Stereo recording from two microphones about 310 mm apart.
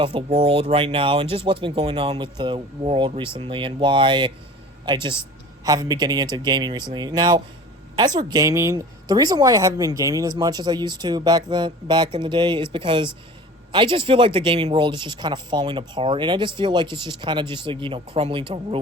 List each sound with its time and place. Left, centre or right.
0.0 s a woman's voice: centre